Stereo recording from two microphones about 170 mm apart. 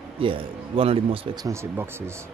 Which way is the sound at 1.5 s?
15° right (ahead or behind).